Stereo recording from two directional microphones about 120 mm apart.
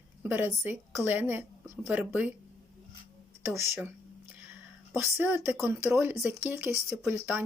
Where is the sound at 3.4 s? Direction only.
25° right (ahead or behind).